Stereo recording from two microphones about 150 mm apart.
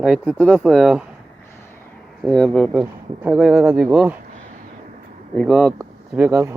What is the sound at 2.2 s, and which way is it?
Speech, 5° left (ahead or behind).